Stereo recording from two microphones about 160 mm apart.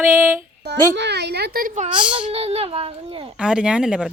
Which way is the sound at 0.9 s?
90° right.